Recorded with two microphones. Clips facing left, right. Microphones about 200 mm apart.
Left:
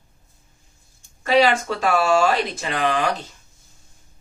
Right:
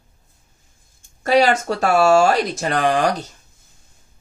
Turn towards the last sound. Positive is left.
turn(degrees=-45)  # may be behind; listen again after turning